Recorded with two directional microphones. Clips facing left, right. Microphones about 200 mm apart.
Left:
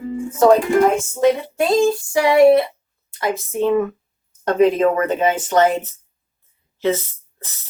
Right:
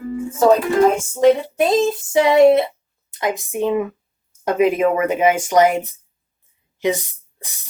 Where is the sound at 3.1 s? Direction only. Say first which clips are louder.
Even; 20° right (ahead or behind).